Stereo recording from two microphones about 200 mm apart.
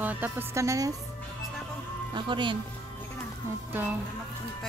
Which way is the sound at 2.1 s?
25° right (ahead or behind).